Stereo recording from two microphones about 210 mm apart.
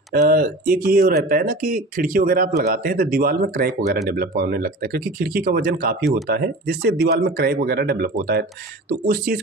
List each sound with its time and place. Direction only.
0.1 s speech: 45° right (ahead or behind)